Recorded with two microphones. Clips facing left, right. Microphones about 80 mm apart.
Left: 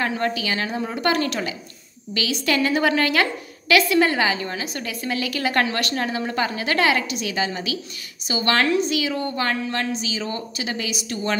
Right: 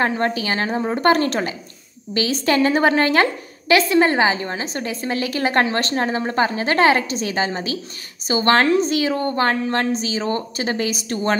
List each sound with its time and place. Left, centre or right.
0.0 s a woman's voice: right